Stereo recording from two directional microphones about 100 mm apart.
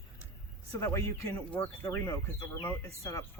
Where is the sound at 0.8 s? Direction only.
30° left (ahead or behind).